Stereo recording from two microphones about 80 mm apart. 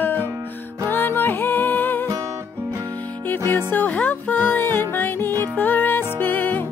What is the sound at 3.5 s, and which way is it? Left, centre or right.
Music, left.